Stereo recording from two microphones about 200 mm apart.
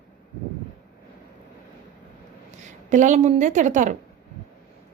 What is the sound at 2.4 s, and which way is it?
A woman's voice, 35° right (ahead or behind).